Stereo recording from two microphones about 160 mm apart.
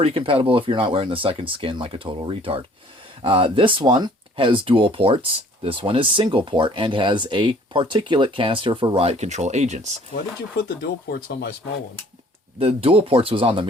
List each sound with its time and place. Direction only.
0.0 s speech: 35° right (ahead or behind)
11.1 s speech: 75° left (ahead or behind)
12.5 s speech: 35° right (ahead or behind)